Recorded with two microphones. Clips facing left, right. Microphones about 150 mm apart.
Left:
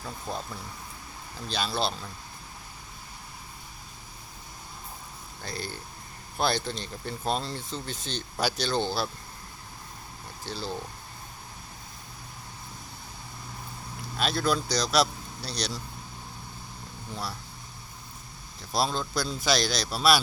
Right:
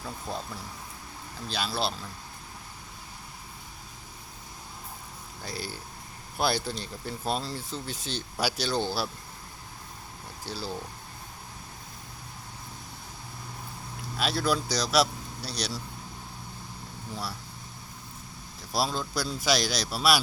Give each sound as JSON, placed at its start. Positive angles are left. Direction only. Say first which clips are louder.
{"t": 0.0, "sound": "speech", "louder": "even", "side_deg": 0}
{"t": 1.5, "sound": "speech", "louder": "left 1 dB", "side_deg": -5}
{"t": 5.4, "sound": "speech", "louder": "left 1 dB", "side_deg": -10}
{"t": 10.4, "sound": "speech", "louder": "left 1 dB", "side_deg": -5}
{"t": 14.2, "sound": "speech", "louder": "left 1 dB", "side_deg": -5}
{"t": 18.7, "sound": "speech", "louder": "left 1 dB", "side_deg": -10}